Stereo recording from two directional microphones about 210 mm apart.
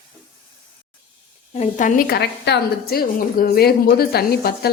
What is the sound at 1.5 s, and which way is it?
A woman's voice, 35° left (ahead or behind).